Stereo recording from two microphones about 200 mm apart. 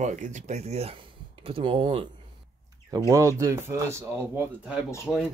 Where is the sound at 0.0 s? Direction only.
35° right (ahead or behind).